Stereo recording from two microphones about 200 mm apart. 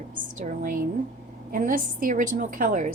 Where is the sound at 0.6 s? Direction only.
45° right (ahead or behind).